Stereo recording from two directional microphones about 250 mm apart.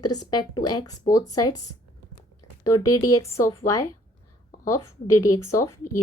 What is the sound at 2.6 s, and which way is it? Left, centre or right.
Speech, centre.